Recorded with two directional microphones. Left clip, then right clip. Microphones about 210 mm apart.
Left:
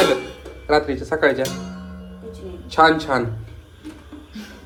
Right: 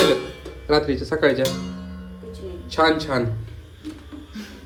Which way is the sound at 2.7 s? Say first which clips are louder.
Left 4 dB; 10° right (ahead or behind).